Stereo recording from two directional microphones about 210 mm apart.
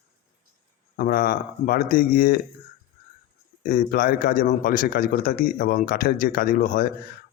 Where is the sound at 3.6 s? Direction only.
40° left (ahead or behind).